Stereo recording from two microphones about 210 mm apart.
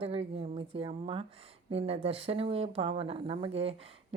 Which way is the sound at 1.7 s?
30° right (ahead or behind).